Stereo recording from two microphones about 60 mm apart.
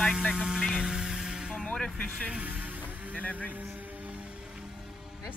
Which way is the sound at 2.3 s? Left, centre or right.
Right.